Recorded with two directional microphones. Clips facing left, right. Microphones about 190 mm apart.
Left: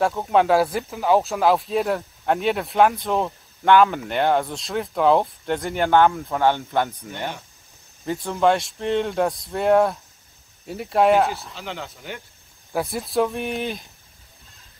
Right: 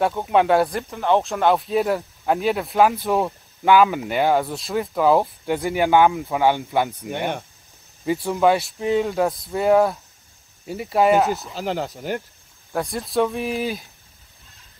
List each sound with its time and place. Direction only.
0.0 s speech: centre (ahead or behind)
11.5 s speech: 40° right (ahead or behind)
12.7 s speech: centre (ahead or behind)